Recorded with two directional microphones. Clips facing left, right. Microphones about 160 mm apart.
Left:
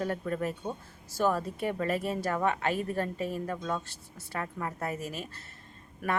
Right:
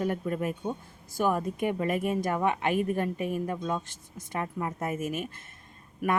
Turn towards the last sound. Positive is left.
turn(degrees=-10)  # may be behind; listen again after turning